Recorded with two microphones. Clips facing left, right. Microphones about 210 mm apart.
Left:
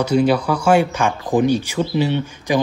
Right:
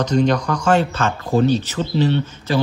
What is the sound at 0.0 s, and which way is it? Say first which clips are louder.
Speech: left 2 dB; 10° left (ahead or behind).